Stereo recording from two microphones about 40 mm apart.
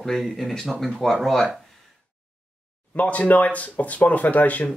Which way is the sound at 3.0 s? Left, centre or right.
Left.